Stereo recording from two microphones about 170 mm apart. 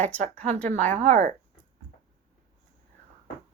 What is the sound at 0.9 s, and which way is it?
Speech, 45° right (ahead or behind).